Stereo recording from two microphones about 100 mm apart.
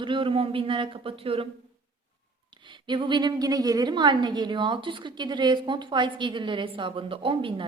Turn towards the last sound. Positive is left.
turn(degrees=-60)  # may be behind; listen again after turning